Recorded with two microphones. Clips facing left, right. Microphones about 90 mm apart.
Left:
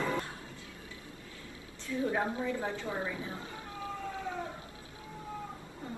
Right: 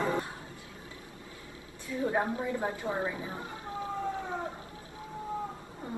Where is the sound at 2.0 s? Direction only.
30° right (ahead or behind).